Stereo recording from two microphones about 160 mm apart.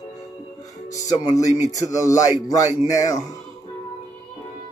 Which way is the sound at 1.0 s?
20° left (ahead or behind).